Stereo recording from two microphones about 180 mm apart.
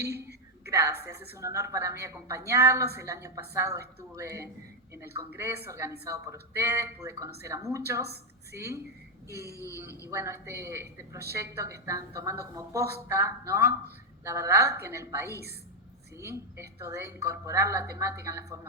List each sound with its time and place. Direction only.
0.0 s a sound: 60° right (ahead or behind)
0.7 s a woman's voice: 15° right (ahead or behind)
9.5 s speech: 15° left (ahead or behind)
10.1 s a woman's voice: 15° right (ahead or behind)